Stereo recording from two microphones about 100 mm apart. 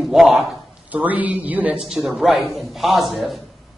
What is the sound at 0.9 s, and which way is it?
Speech, 15° right (ahead or behind).